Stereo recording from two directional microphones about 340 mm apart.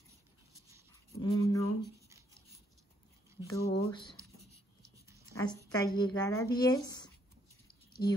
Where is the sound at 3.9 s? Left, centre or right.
Centre.